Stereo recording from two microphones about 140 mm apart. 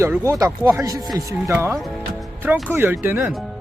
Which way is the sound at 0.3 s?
25° right (ahead or behind).